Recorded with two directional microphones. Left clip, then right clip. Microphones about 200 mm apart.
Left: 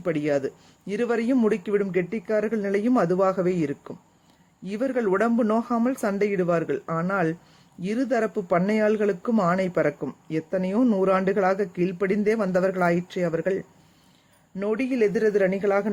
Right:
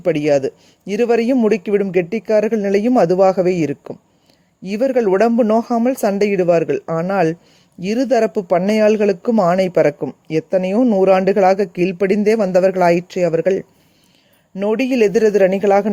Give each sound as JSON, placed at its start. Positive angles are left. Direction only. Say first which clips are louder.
{"t": 0.0, "sound": "speech", "louder": "right 9 dB", "side_deg": -35}